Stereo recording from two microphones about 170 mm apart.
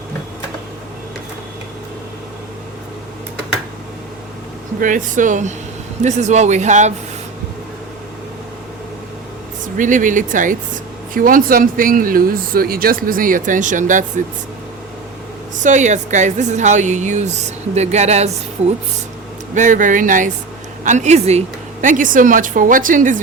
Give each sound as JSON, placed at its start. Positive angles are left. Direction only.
{"t": 4.8, "sound": "a woman's voice", "side_deg": -50}
{"t": 9.7, "sound": "a woman's voice", "side_deg": -50}
{"t": 15.6, "sound": "a woman's voice", "side_deg": -45}
{"t": 19.5, "sound": "a woman's voice", "side_deg": -50}